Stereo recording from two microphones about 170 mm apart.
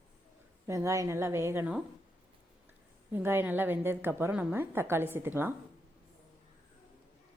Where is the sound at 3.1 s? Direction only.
10° right (ahead or behind).